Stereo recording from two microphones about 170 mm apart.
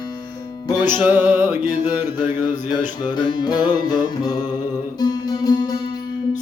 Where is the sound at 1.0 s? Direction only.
10° right (ahead or behind).